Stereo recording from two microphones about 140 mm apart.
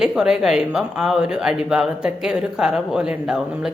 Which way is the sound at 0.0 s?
5° right (ahead or behind).